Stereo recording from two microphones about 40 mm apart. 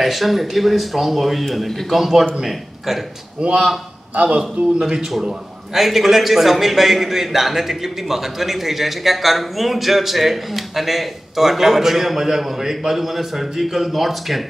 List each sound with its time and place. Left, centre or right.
0.0 s a man's voice: centre
3.3 s a man's voice: right
4.1 s a man's voice: right
4.7 s a man's voice: centre